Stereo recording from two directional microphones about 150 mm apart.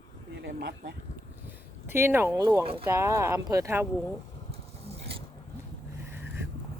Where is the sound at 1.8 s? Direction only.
15° right (ahead or behind).